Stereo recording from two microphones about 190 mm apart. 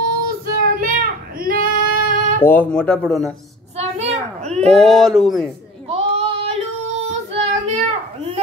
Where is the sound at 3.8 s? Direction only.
35° right (ahead or behind).